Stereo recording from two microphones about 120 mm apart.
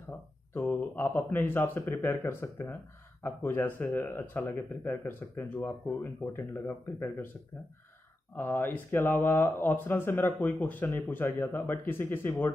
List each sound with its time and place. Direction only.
0.6 s speech: 15° left (ahead or behind)
8.4 s speech: 15° left (ahead or behind)